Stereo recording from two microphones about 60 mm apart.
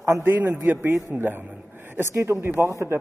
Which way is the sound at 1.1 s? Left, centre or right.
Right.